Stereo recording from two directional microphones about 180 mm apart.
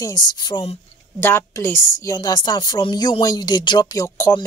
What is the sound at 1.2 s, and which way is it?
A woman's voice, 15° left (ahead or behind).